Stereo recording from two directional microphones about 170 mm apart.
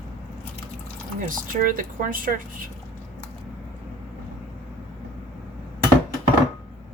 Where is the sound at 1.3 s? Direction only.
55° right (ahead or behind).